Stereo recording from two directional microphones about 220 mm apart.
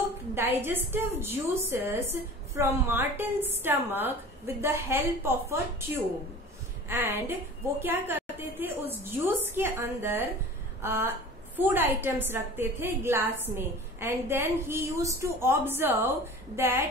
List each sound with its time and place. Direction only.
0.3 s a woman's voice: 10° right (ahead or behind)
6.9 s a woman's voice: 10° right (ahead or behind)